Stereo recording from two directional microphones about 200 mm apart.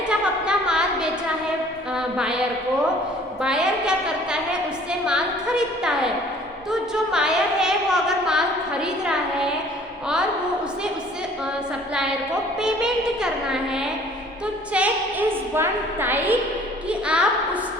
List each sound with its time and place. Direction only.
0.1 s a sound: 5° right (ahead or behind)
2.0 s a woman's voice: 5° right (ahead or behind)
3.4 s a woman's voice: 5° right (ahead or behind)
11.9 s a woman's voice: 5° right (ahead or behind)